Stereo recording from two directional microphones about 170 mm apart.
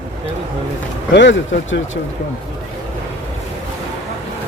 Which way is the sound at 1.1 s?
90° left.